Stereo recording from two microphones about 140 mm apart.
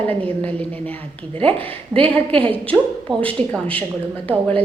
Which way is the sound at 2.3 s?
40° right (ahead or behind).